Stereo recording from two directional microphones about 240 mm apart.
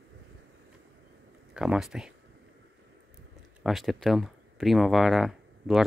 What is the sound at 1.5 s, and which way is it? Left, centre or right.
Speech, centre.